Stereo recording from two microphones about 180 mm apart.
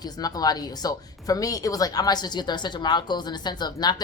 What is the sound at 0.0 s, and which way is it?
A woman's voice, 20° left (ahead or behind).